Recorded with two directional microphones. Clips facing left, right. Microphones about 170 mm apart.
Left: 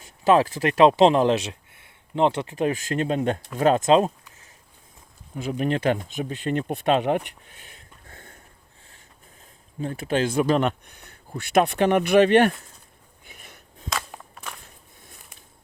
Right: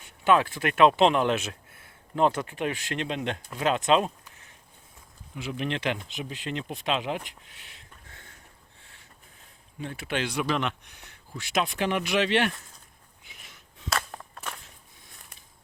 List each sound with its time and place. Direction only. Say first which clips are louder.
0.0 s speech: left 4 dB; 35° left (ahead or behind)
3.8 s speech: left 3 dB; 30° left (ahead or behind)
5.3 s speech: left 6 dB; 40° left (ahead or behind)
8.1 s a sound: left 8 dB; 50° left (ahead or behind)
9.8 s speech: left 7 dB; 40° left (ahead or behind)
11.3 s speech: left 8 dB; 60° left (ahead or behind)
13.2 s wheeze: left 6 dB; 50° left (ahead or behind)